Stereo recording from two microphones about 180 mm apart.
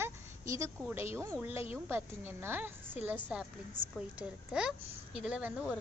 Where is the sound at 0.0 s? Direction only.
15° right (ahead or behind).